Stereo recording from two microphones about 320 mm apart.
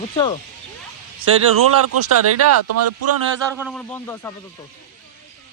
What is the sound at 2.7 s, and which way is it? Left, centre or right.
Speech, right.